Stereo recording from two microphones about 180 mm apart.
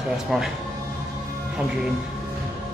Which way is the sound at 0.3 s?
5° right (ahead or behind).